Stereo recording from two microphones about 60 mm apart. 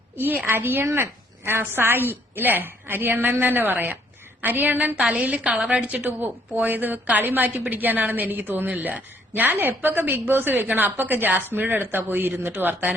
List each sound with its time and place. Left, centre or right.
0.4 s a woman's voice: right
0.9 s a woman's voice: right
4.9 s a woman's voice: centre
5.2 s a woman's voice: right
5.5 s a woman's voice: centre
5.8 s a woman's voice: right